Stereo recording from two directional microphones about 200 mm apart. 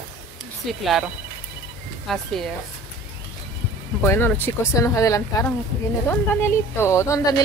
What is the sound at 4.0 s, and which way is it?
A woman's voice, 10° left (ahead or behind).